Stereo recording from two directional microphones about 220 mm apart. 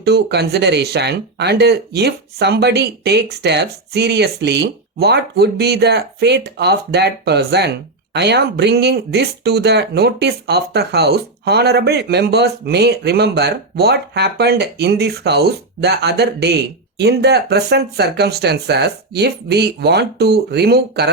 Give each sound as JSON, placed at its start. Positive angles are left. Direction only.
{"t": 0.0, "sound": "speech", "side_deg": -50}